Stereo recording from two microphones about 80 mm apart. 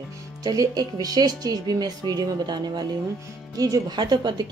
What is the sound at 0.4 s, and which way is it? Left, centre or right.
Speech, right.